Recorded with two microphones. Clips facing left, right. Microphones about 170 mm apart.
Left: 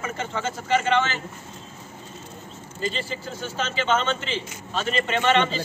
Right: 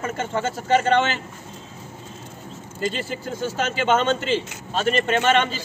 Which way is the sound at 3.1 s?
50° right (ahead or behind).